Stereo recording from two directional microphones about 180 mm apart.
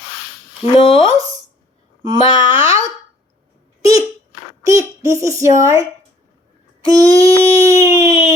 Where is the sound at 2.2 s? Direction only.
25° left (ahead or behind).